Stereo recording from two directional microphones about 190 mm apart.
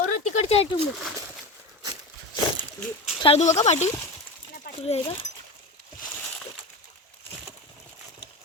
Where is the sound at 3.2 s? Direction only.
30° left (ahead or behind).